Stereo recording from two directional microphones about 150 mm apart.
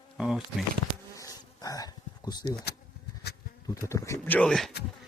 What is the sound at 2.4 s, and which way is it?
Speech, 90° left.